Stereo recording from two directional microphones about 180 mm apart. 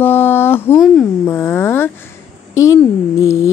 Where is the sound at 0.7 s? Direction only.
Centre (ahead or behind).